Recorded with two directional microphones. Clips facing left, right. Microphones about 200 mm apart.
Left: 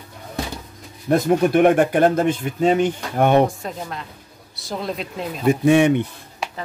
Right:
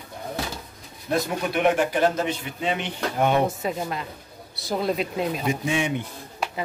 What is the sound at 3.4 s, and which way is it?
Speech, 5° right (ahead or behind).